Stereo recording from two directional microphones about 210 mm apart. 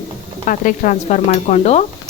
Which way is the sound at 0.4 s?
40° left (ahead or behind).